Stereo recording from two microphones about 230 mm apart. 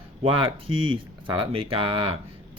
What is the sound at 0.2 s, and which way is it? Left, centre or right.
Speech, right.